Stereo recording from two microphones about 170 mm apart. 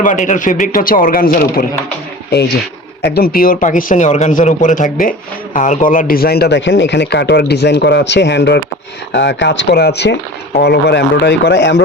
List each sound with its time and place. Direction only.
0.0 s a man's voice: 50° left (ahead or behind)
3.0 s a man's voice: 65° left (ahead or behind); by 11.8 s 85° left